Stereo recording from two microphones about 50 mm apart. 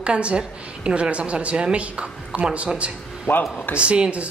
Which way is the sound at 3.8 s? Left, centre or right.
Centre.